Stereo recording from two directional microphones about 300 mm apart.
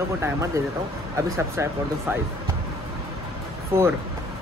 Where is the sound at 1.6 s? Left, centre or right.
Centre.